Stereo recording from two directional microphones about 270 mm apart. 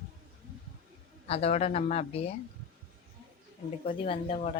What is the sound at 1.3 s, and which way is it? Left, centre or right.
Speech, left.